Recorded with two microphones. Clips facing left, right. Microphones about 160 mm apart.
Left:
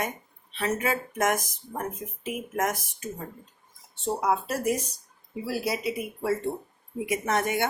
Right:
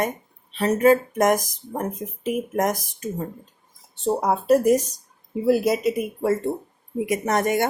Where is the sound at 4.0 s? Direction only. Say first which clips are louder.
Right 4 dB; 35° right (ahead or behind).